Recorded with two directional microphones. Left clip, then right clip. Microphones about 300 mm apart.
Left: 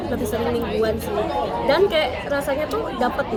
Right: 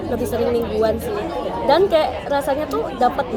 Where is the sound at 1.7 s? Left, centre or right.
Centre.